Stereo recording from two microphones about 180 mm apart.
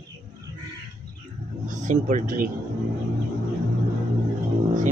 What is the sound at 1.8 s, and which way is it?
Speech, 45° right (ahead or behind).